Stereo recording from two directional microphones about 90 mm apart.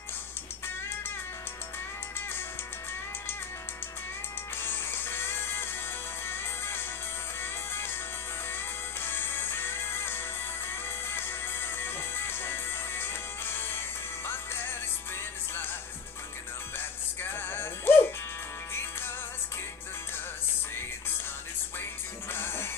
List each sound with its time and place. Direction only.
4.6 s music: 25° left (ahead or behind)
9.0 s music: 25° left (ahead or behind)
16.7 s music: 25° left (ahead or behind)
22.3 s music: 25° left (ahead or behind)